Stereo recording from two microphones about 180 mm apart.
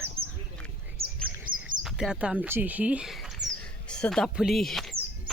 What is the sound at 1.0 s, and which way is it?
Bird, 55° right (ahead or behind).